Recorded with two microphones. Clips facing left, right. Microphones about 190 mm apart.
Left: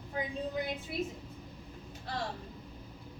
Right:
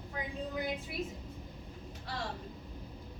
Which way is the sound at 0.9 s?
25° left (ahead or behind).